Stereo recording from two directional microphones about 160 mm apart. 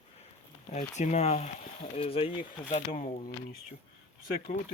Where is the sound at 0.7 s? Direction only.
45° left (ahead or behind).